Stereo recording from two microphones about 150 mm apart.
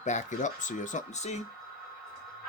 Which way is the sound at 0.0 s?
55° left (ahead or behind).